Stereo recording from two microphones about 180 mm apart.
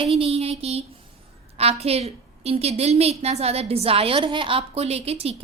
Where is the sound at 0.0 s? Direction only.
30° right (ahead or behind).